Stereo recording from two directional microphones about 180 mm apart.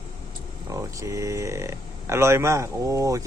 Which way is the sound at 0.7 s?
15° right (ahead or behind).